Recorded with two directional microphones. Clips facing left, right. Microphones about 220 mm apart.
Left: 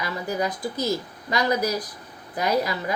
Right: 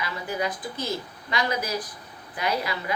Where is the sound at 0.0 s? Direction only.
40° left (ahead or behind).